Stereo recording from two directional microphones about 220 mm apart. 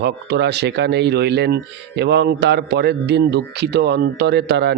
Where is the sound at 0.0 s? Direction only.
50° right (ahead or behind).